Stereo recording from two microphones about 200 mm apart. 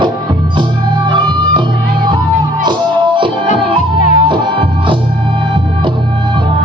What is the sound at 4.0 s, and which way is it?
Music, 40° left (ahead or behind).